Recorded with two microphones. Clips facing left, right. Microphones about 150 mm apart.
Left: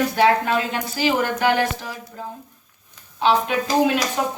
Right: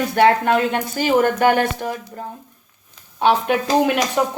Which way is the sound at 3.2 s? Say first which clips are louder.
Right 2 dB; 60° right (ahead or behind).